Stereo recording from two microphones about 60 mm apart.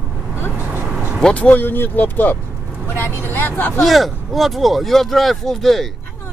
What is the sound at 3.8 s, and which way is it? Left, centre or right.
Speech, centre.